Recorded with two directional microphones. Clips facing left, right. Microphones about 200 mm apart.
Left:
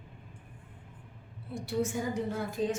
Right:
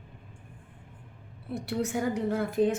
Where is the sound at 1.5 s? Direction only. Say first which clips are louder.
Right 2 dB; 65° right (ahead or behind).